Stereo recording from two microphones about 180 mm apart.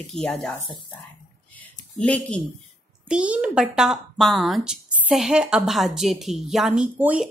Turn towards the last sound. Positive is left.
turn(degrees=-5)  # may be behind; listen again after turning